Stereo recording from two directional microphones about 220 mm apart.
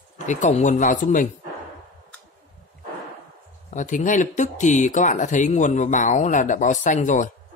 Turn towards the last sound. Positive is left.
turn(degrees=35)  # may be behind; listen again after turning